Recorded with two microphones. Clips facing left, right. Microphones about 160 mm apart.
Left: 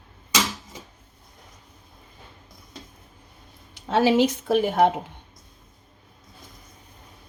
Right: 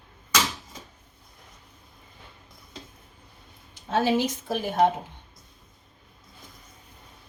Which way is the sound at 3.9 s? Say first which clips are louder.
Left 5 dB; 75° left (ahead or behind).